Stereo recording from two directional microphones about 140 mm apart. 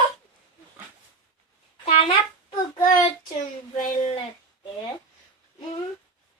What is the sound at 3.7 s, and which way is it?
Speech, 55° left (ahead or behind).